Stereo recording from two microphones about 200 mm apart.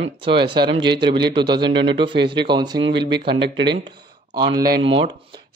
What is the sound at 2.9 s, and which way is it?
Speech, 60° right (ahead or behind).